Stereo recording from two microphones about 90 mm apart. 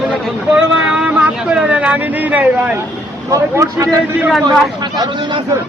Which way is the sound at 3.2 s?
40° right (ahead or behind).